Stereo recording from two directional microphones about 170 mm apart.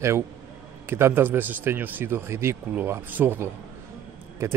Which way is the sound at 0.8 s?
15° right (ahead or behind).